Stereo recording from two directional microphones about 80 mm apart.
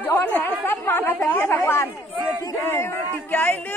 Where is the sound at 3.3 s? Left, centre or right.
Left.